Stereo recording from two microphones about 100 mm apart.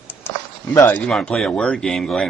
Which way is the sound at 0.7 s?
20° left (ahead or behind).